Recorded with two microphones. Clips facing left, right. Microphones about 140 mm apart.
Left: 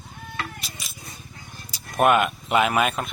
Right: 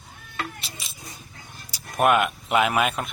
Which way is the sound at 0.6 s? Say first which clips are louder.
Left 1 dB; 30° right (ahead or behind).